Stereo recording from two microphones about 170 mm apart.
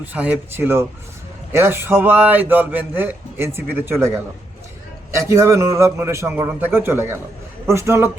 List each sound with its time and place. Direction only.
0.0 s a man's voice: 10° right (ahead or behind)